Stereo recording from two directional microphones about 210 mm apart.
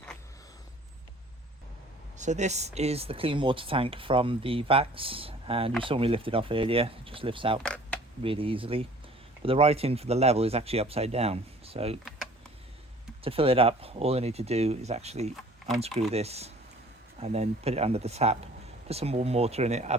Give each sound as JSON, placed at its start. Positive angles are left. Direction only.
{"t": 2.1, "sound": "speech", "side_deg": -35}
{"t": 13.2, "sound": "speech", "side_deg": -25}